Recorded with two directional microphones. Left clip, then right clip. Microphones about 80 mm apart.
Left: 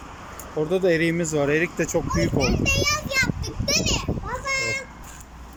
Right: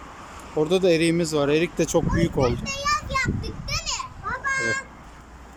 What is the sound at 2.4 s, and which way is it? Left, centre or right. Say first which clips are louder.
A child's voice: left 2 dB; left.